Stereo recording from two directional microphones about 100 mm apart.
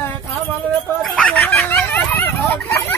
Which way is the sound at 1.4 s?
20° left (ahead or behind).